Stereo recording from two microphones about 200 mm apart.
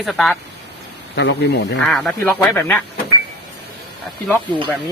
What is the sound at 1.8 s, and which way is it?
Speech, 5° left (ahead or behind).